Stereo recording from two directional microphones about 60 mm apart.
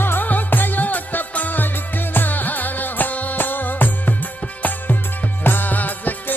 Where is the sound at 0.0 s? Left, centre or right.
Left.